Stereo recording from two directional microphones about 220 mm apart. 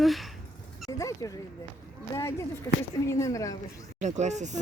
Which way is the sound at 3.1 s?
15° left (ahead or behind).